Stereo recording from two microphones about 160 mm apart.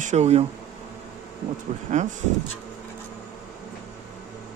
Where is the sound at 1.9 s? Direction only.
45° right (ahead or behind).